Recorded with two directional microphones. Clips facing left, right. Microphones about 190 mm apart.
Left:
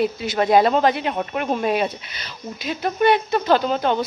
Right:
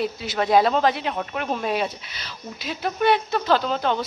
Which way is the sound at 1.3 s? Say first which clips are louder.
Left 5 dB; 10° left (ahead or behind).